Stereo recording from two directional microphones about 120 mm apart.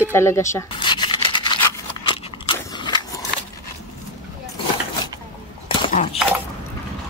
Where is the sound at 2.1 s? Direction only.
40° left (ahead or behind).